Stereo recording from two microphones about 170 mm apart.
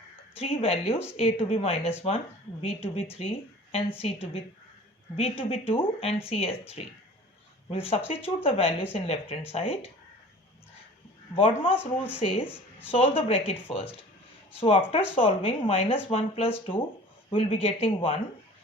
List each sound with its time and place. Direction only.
0.3 s speech: 35° left (ahead or behind)
11.3 s speech: 35° left (ahead or behind)